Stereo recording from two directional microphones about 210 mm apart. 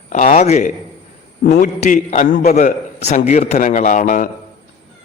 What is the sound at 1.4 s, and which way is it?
Speech, 50° left (ahead or behind).